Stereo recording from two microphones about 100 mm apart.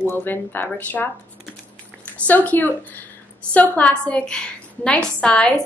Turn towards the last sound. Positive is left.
turn(degrees=10)  # may be behind; listen again after turning